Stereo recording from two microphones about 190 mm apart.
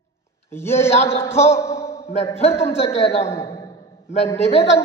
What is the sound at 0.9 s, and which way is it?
Speech, 35° left (ahead or behind).